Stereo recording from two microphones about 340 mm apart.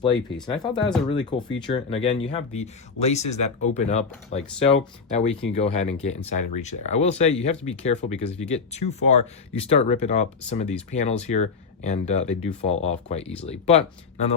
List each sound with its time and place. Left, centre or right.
0.4 s speech: centre